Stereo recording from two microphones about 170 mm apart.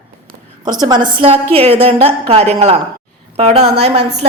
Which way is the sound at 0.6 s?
25° right (ahead or behind).